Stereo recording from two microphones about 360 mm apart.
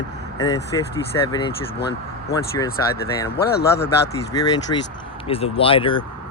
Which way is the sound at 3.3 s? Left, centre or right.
Left.